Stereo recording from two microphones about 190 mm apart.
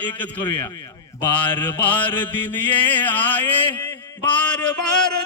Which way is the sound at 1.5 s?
25° left (ahead or behind).